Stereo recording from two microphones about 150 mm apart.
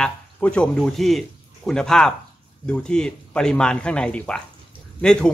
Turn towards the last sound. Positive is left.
turn(degrees=5)  # may be behind; listen again after turning